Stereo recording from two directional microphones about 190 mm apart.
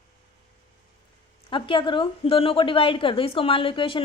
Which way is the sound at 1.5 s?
25° left (ahead or behind).